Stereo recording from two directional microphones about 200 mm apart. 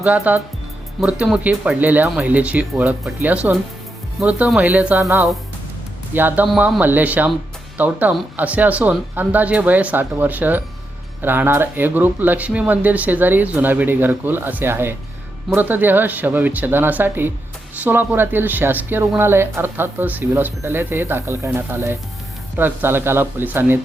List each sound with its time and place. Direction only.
0.0 s speech: 10° right (ahead or behind)